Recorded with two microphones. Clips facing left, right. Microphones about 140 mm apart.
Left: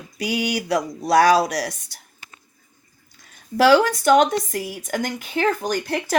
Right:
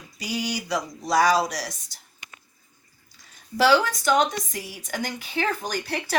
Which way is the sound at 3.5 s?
55° left (ahead or behind).